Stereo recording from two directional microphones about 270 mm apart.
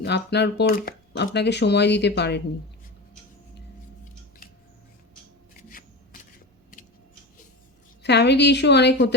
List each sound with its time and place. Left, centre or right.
0.0 s speech: left
5.5 s shuffling cards: left
8.0 s speech: left